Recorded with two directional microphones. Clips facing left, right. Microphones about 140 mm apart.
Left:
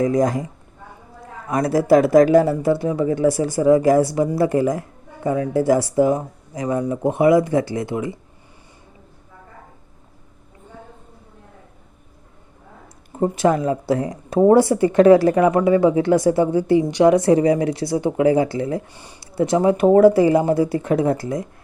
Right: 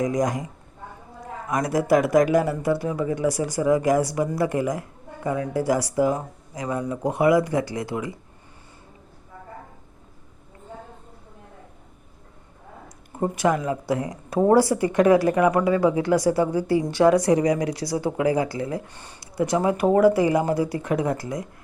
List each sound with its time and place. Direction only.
0.1 s speech: 30° left (ahead or behind)
13.1 s speech: 25° left (ahead or behind)
18.9 s speech: 10° left (ahead or behind)
19.2 s speech: 25° left (ahead or behind)